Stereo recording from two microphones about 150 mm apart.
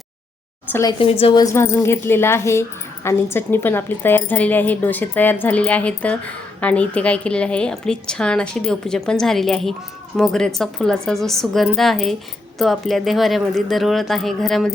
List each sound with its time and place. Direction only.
0.7 s a woman's voice: 20° left (ahead or behind); by 14.7 s centre (ahead or behind)